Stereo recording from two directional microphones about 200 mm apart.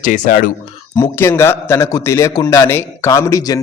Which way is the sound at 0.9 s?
15° left (ahead or behind).